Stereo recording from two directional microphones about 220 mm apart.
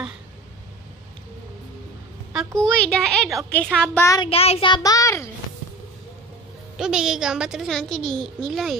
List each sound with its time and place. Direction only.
2.6 s a child's voice: 5° left (ahead or behind)
4.3 s a child's voice: 25° left (ahead or behind)
6.8 s a child's voice: 5° right (ahead or behind)